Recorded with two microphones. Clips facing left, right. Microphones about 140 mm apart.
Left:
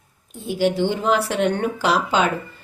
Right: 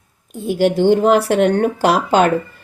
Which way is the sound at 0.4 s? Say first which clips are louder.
Right 6 dB; 55° right (ahead or behind).